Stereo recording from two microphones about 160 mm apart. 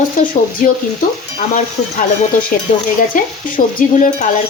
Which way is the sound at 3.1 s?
55° left (ahead or behind).